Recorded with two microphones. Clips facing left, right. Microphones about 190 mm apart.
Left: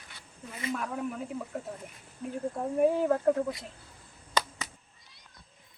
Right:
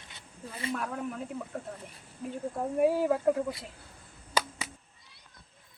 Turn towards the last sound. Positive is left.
turn(degrees=-10)  # may be behind; listen again after turning